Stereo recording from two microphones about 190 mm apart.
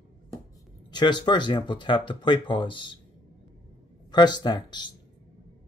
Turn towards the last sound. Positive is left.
turn(degrees=25)  # may be behind; listen again after turning